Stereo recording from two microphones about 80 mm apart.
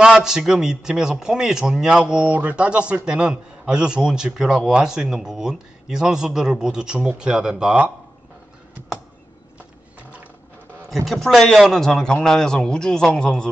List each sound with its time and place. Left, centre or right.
0.0 s a man's voice: centre
11.1 s a man's voice: centre